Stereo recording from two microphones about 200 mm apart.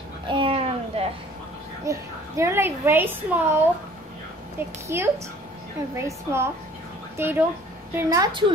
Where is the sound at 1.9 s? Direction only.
15° right (ahead or behind).